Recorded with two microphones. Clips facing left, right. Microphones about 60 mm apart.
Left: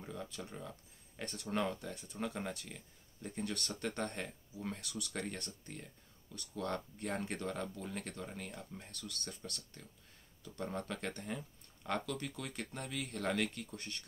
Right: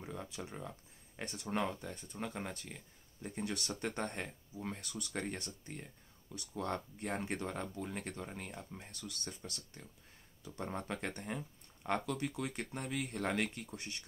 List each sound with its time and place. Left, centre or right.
0.3 s speech: centre
0.6 s a sound: right
1.2 s speech: centre
5.4 s speech: centre
12.3 s speech: centre